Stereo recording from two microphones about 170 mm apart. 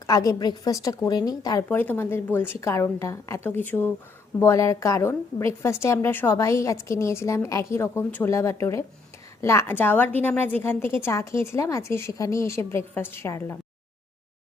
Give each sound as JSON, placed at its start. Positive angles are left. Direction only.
{"t": 0.1, "sound": "a woman's voice", "side_deg": 20}